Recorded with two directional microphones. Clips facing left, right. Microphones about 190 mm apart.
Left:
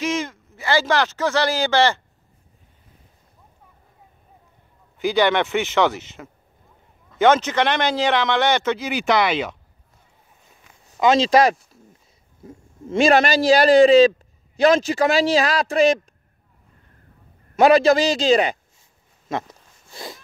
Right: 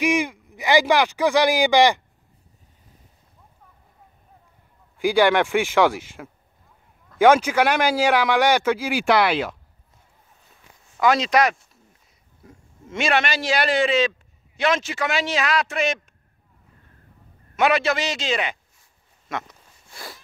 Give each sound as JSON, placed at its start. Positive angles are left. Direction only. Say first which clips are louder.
{"t": 0.0, "sound": "speech", "louder": "right 3 dB", "side_deg": -15}
{"t": 4.9, "sound": "a man's voice", "louder": "right 1 dB", "side_deg": -10}
{"t": 11.0, "sound": "a man's voice", "louder": "left 3 dB", "side_deg": 25}
{"t": 17.6, "sound": "a man's voice", "louder": "left 7 dB", "side_deg": 35}
{"t": 19.9, "sound": "sneeze", "louder": "left 4 dB", "side_deg": 20}